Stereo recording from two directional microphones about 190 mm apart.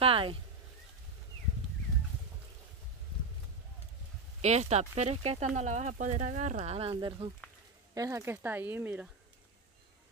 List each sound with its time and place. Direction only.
0.0 s speech: 30° right (ahead or behind)
4.4 s speech: 35° right (ahead or behind); by 9.1 s 10° right (ahead or behind)